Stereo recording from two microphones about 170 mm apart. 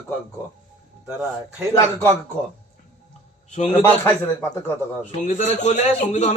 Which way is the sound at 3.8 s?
10° left (ahead or behind).